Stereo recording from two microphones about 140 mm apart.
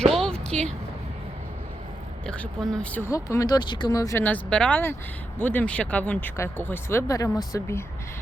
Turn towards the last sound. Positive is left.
turn(degrees=20)  # may be behind; listen again after turning